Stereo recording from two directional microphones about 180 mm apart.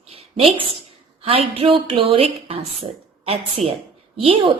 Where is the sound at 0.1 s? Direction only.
35° right (ahead or behind).